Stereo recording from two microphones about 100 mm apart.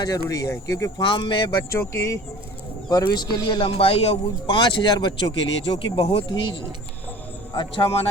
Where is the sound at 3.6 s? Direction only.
70° left (ahead or behind).